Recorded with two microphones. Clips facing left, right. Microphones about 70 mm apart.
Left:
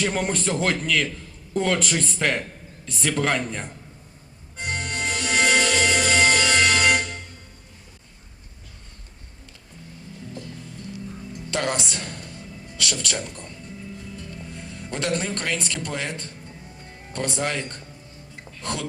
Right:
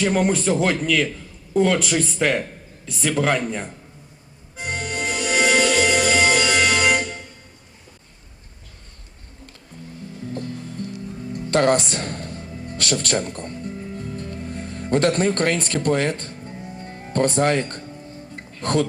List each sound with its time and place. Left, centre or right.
0.0 s speech: centre
4.5 s music: centre
10.3 s music: right
11.5 s a woman's voice: right
13.9 s music: right